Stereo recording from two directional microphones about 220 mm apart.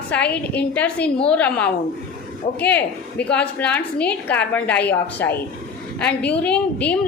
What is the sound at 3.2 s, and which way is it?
A woman's voice, 5° left (ahead or behind).